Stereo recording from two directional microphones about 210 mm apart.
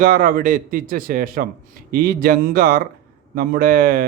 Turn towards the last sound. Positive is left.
turn(degrees=-40)  # may be behind; listen again after turning